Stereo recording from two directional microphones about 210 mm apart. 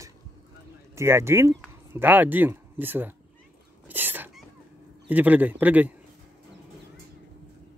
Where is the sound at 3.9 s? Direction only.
10° right (ahead or behind).